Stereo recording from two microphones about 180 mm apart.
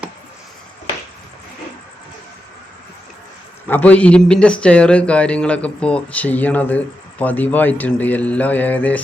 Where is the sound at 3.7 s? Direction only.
10° left (ahead or behind).